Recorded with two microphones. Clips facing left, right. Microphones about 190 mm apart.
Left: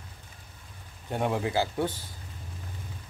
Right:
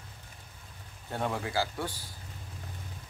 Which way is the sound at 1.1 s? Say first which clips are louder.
Left 5 dB; 15° left (ahead or behind).